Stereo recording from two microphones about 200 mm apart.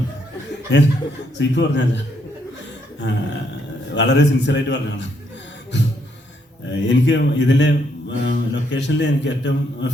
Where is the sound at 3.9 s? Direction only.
60° left (ahead or behind).